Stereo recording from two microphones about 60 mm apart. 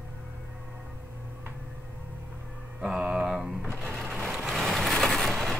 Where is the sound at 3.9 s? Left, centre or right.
Centre.